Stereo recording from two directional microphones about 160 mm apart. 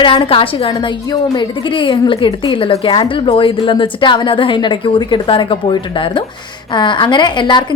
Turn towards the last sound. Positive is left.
turn(degrees=30)  # may be behind; listen again after turning